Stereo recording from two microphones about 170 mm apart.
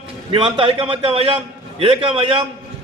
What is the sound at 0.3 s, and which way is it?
A man's voice, 30° right (ahead or behind).